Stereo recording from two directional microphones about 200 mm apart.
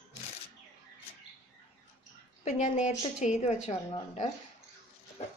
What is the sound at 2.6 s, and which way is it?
Speech, 35° left (ahead or behind).